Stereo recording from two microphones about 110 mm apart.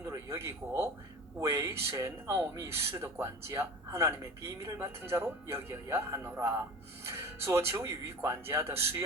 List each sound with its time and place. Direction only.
0.0 s speech: 25° right (ahead or behind)